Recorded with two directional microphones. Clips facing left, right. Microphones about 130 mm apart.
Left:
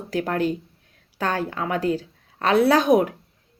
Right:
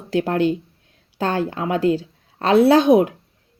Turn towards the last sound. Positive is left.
turn(degrees=-30)  # may be behind; listen again after turning